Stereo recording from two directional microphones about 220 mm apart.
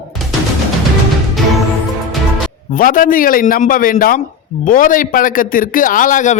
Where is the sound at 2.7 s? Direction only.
35° left (ahead or behind).